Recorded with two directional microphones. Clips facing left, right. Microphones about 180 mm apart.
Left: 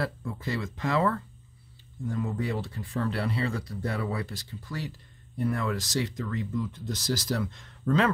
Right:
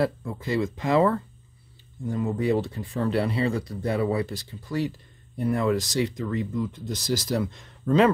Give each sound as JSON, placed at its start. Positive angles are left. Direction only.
{"t": 0.0, "sound": "speech", "side_deg": -15}